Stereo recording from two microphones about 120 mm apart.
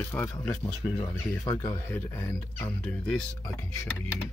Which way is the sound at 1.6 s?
15° left (ahead or behind).